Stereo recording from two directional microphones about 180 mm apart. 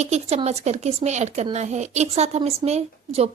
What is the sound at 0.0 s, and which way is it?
Speech, 35° right (ahead or behind).